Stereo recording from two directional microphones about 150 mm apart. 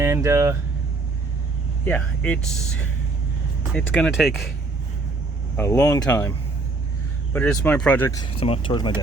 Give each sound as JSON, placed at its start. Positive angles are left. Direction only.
{"t": 0.0, "sound": "speech", "side_deg": -20}
{"t": 1.8, "sound": "speech", "side_deg": 10}
{"t": 5.5, "sound": "speech", "side_deg": 15}
{"t": 7.3, "sound": "speech", "side_deg": 10}
{"t": 8.4, "sound": "speech", "side_deg": 40}